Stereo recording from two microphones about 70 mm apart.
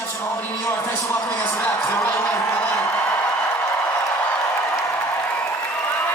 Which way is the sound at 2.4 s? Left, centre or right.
Centre.